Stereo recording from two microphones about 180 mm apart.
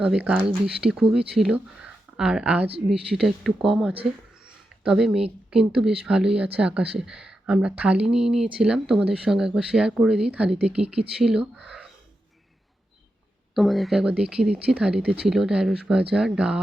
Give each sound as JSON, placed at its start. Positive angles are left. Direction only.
{"t": 0.0, "sound": "speech", "side_deg": -5}
{"t": 2.6, "sound": "speech", "side_deg": -30}
{"t": 3.1, "sound": "speech", "side_deg": 0}
{"t": 13.5, "sound": "speech", "side_deg": 0}